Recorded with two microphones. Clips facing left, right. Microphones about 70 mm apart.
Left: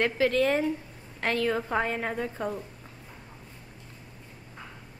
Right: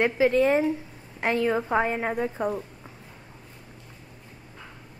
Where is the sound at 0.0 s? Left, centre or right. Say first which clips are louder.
Right 3 dB; centre.